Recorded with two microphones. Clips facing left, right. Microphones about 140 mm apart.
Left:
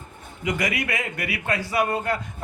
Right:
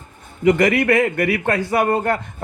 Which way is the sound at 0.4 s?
50° right (ahead or behind).